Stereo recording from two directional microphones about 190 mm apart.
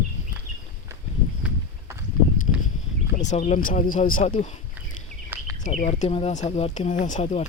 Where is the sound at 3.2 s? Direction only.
40° left (ahead or behind).